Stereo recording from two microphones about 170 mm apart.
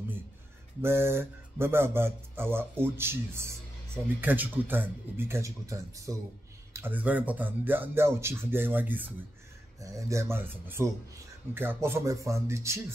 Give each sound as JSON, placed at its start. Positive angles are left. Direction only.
{"t": 0.8, "sound": "speech", "side_deg": -15}